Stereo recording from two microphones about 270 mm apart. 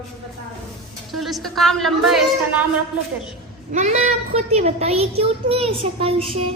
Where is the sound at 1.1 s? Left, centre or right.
Centre.